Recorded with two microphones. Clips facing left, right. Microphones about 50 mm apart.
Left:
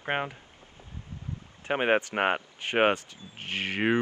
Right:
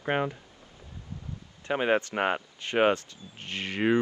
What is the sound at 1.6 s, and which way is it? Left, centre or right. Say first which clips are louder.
Speech: left 1 dB; left.